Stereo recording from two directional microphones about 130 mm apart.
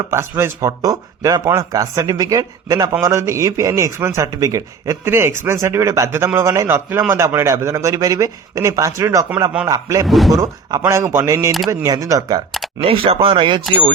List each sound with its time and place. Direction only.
0.1 s a man's voice: 20° right (ahead or behind)
10.1 s speech: centre (ahead or behind)
10.3 s a man's voice: 25° right (ahead or behind)
12.8 s speech: 45° right (ahead or behind)